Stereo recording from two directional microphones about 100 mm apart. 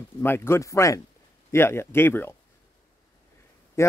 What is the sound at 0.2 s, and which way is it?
Speech, 25° left (ahead or behind).